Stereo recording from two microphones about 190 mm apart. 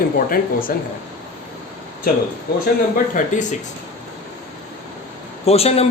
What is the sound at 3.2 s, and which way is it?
Speech, 45° left (ahead or behind).